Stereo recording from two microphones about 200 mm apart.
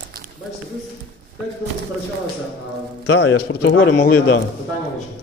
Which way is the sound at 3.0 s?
65° left (ahead or behind).